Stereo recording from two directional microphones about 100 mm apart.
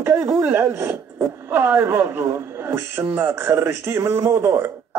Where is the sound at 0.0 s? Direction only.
25° right (ahead or behind).